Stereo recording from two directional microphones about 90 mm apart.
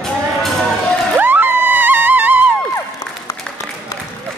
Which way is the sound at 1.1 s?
20° right (ahead or behind).